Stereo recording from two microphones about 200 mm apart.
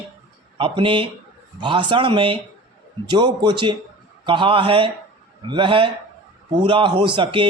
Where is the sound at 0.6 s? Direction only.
25° right (ahead or behind).